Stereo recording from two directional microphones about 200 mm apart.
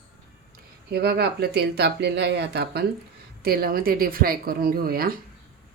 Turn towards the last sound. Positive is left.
turn(degrees=-45)  # may be behind; listen again after turning